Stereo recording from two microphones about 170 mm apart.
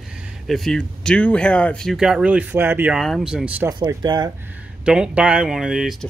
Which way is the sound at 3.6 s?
25° right (ahead or behind).